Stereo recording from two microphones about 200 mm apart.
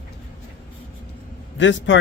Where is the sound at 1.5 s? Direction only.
65° left (ahead or behind).